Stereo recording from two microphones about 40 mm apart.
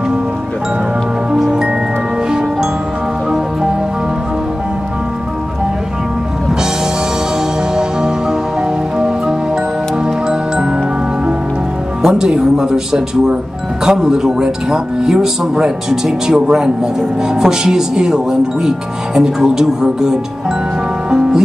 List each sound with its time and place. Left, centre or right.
1.4 s music: centre
7.7 s music: centre
10.0 s music: right
12.0 s speech: centre